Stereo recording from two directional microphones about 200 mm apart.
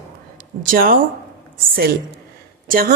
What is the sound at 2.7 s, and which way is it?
Speech, 45° right (ahead or behind).